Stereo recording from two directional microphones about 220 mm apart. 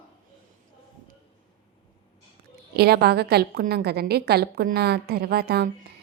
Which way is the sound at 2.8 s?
45° right (ahead or behind).